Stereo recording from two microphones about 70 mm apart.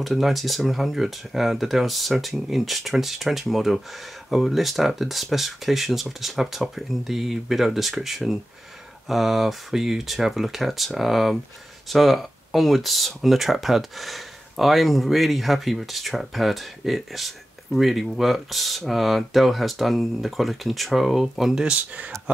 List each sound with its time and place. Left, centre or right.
0.0 s speech: centre
21.6 s speech: centre